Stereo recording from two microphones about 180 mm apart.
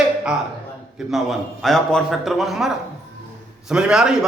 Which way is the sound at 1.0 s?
Centre (ahead or behind).